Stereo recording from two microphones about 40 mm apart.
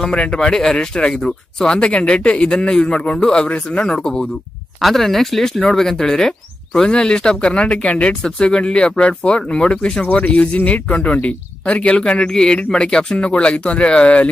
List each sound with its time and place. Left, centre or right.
0.1 s speech: left
4.7 s speech: centre; by 14.3 s left